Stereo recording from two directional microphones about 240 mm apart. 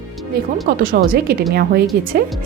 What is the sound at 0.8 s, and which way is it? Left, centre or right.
Speech, right.